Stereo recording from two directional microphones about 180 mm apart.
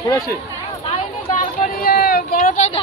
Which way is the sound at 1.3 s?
50° left (ahead or behind).